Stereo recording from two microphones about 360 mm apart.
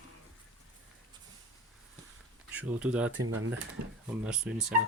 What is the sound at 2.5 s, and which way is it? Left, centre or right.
Speech, centre.